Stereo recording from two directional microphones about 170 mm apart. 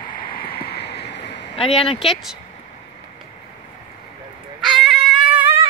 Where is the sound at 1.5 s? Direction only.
35° left (ahead or behind).